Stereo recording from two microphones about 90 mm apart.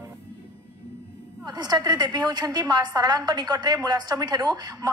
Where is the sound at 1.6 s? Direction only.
50° right (ahead or behind).